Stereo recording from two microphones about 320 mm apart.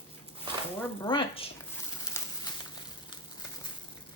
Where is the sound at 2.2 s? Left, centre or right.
Centre.